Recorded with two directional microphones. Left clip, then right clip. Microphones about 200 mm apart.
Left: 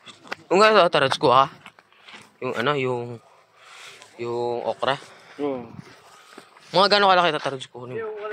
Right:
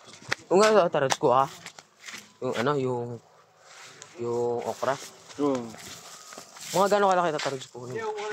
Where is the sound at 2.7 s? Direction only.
10° left (ahead or behind).